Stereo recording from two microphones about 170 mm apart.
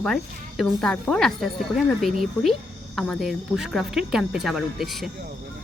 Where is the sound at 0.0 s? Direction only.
Centre (ahead or behind).